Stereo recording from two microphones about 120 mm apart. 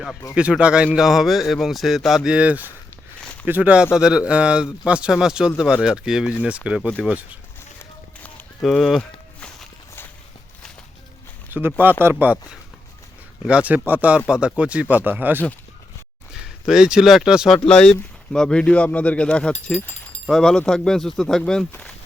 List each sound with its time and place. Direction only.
0.3 s speech: 10° right (ahead or behind)
8.6 s speech: centre (ahead or behind)
11.5 s speech: 15° right (ahead or behind)
16.3 s speech: 5° right (ahead or behind)
17.7 s speech: 5° left (ahead or behind)